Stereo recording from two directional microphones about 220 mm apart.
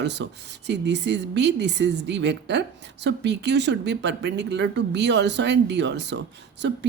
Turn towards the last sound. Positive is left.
turn(degrees=-50)  # may be behind; listen again after turning